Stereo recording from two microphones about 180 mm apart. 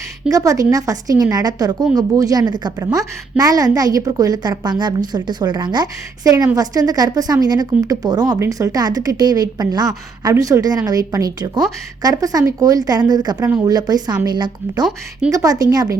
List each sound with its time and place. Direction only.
0.3 s a woman's voice: 20° right (ahead or behind)